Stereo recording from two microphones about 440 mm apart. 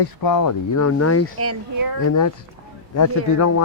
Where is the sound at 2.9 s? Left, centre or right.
Left.